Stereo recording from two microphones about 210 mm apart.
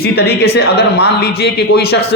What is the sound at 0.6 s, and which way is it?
A man's voice, 50° left (ahead or behind).